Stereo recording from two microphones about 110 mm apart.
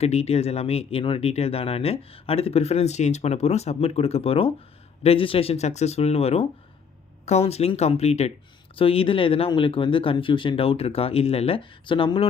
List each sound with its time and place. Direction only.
0.0 s speech: 70° left (ahead or behind)
8.7 s speech: 60° left (ahead or behind)